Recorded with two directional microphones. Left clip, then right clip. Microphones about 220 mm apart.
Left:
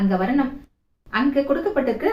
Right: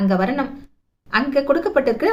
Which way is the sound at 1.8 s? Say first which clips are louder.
Right 5 dB; 50° right (ahead or behind).